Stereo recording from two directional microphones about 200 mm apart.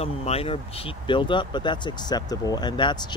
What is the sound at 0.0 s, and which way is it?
Speech, 30° left (ahead or behind).